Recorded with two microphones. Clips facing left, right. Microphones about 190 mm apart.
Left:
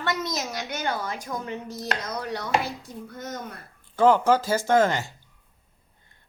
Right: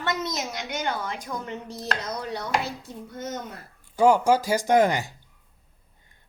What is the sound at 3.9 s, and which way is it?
Speech, 10° right (ahead or behind).